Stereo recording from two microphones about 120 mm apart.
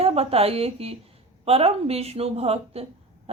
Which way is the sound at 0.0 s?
55° right (ahead or behind).